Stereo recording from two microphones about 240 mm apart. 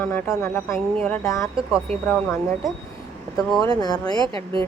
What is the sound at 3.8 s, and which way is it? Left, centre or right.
Speech, centre.